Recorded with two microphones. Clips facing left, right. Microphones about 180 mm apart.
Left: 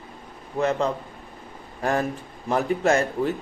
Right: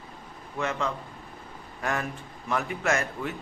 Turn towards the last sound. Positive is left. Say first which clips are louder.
# left 7 dB
turn(degrees=35)  # may be behind; listen again after turning